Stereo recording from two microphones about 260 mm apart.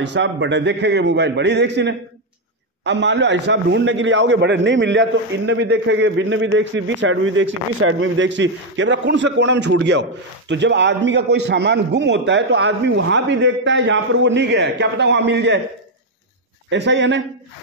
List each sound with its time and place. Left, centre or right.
0.0 s a man's voice: right
16.7 s a man's voice: right